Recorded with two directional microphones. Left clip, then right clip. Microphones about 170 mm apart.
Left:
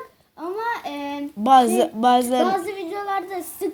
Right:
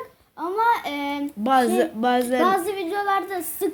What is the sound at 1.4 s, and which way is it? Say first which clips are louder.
Speech: left 4 dB; 35° left (ahead or behind).